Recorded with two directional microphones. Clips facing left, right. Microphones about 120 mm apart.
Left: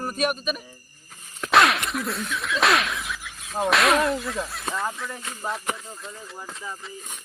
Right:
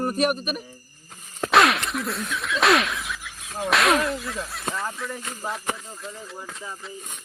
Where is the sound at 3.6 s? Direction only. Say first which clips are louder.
Left 1 dB; centre (ahead or behind).